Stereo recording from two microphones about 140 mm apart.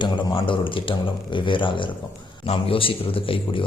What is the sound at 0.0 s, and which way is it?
A man's voice, 35° left (ahead or behind).